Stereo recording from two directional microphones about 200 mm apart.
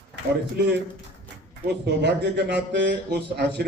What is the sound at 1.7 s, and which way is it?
A man's voice, 60° right (ahead or behind).